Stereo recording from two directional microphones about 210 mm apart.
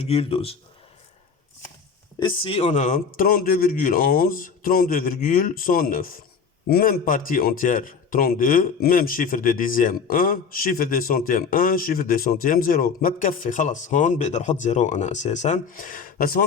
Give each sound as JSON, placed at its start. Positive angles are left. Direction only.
{"t": 0.0, "sound": "speech", "side_deg": 30}
{"t": 2.1, "sound": "a man's voice", "side_deg": 25}